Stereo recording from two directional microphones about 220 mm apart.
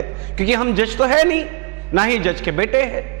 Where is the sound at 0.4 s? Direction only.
10° right (ahead or behind).